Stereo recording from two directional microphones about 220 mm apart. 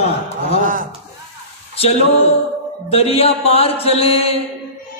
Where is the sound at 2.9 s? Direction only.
25° left (ahead or behind).